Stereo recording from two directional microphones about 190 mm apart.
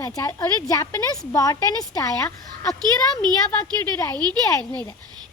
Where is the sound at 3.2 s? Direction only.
20° right (ahead or behind).